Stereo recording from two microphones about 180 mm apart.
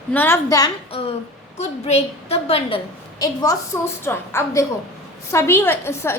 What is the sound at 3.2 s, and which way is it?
A woman's voice, 20° left (ahead or behind).